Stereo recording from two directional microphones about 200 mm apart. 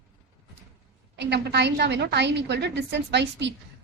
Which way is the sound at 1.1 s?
60° right (ahead or behind).